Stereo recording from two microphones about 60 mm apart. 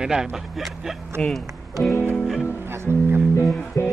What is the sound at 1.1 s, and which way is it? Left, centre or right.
Speech, right.